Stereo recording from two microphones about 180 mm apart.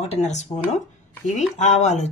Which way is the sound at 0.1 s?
40° left (ahead or behind).